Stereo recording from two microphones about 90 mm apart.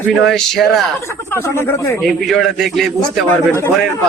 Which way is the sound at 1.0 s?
30° left (ahead or behind).